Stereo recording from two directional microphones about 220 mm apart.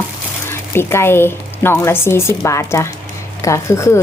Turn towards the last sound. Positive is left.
turn(degrees=15)  # may be behind; listen again after turning